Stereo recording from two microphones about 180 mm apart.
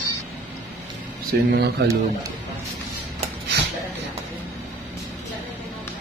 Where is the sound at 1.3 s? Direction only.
60° right (ahead or behind).